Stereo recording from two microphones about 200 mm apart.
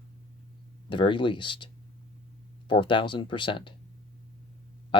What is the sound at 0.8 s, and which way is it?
Speech, 25° left (ahead or behind).